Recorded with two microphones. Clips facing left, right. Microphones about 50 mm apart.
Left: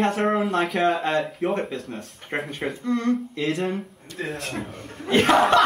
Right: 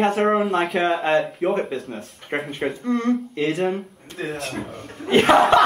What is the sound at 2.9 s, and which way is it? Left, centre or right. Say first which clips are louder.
Speech: right 1 dB; centre.